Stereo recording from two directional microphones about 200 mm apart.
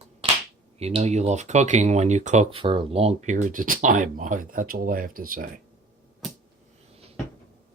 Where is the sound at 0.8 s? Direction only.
30° right (ahead or behind).